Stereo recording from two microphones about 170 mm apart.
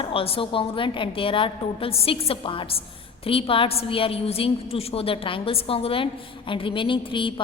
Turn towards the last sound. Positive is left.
turn(degrees=30)  # may be behind; listen again after turning